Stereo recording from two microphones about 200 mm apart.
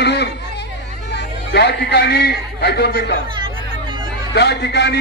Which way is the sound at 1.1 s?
55° left (ahead or behind).